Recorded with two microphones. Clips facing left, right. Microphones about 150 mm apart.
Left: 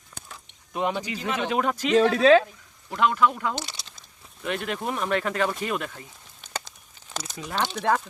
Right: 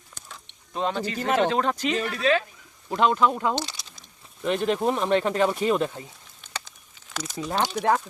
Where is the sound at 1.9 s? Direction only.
90° left.